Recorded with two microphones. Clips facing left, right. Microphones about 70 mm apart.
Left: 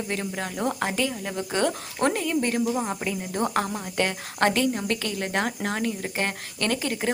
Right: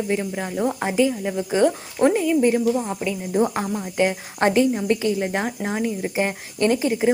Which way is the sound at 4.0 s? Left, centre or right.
Centre.